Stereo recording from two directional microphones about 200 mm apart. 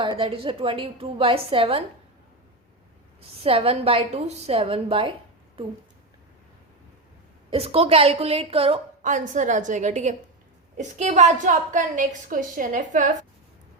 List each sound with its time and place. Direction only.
0.0 s a woman's voice: 25° right (ahead or behind)
3.2 s a woman's voice: 30° right (ahead or behind)
7.5 s a woman's voice: 30° right (ahead or behind)